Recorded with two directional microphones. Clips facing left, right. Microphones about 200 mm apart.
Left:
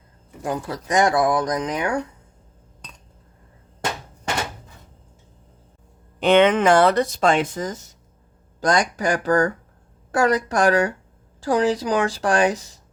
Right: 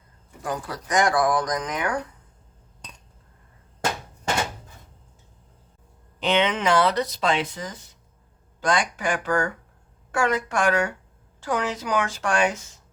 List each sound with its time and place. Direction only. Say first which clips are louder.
0.4 s speech: left 4 dB; 25° left (ahead or behind)
6.1 s speech: left 7 dB; 50° left (ahead or behind); by 12.8 s 35° left (ahead or behind)